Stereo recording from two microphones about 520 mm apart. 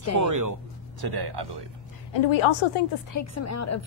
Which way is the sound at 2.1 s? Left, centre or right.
Left.